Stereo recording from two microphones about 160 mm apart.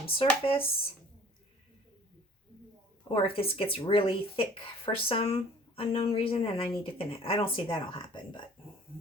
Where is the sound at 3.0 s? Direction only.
35° left (ahead or behind).